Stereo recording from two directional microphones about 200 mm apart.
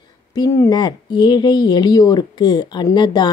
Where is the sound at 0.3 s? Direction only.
15° left (ahead or behind).